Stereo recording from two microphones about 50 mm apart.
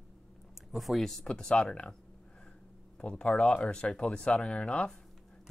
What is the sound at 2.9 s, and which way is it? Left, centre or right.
Speech, centre.